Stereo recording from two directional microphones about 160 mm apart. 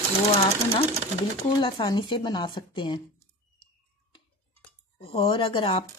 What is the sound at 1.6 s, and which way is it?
A woman's voice, 30° left (ahead or behind).